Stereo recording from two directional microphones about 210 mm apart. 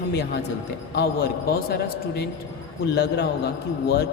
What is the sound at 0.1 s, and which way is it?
A man's voice, 50° left (ahead or behind).